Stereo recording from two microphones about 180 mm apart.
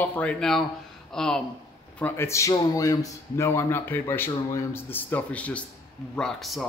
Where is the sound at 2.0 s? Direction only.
15° left (ahead or behind).